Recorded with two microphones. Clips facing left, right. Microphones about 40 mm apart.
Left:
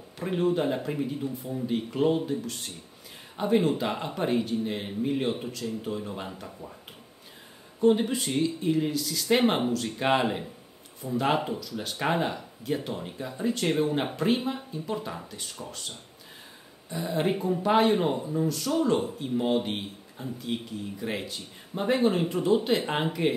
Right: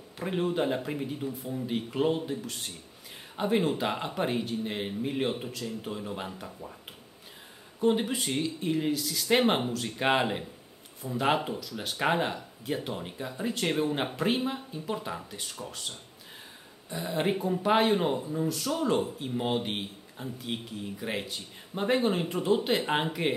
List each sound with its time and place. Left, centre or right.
0.2 s speech: centre
7.8 s speech: centre
16.9 s speech: centre